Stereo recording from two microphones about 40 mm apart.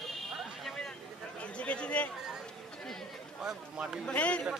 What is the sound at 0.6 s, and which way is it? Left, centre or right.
Speech, centre.